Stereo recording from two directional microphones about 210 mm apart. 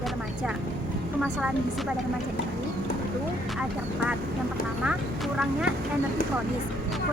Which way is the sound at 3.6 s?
5° right (ahead or behind).